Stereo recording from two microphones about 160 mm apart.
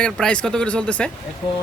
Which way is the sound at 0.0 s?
5° left (ahead or behind).